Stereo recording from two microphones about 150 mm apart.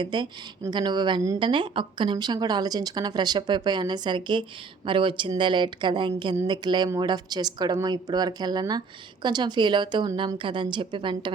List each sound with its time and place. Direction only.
0.0 s a woman's voice: 30° right (ahead or behind)